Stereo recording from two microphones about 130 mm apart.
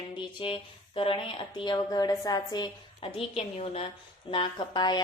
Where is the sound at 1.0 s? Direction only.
40° left (ahead or behind).